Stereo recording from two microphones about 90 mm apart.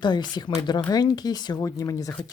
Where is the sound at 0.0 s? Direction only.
55° left (ahead or behind).